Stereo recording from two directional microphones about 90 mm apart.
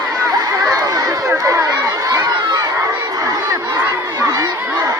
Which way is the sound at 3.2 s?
40° right (ahead or behind).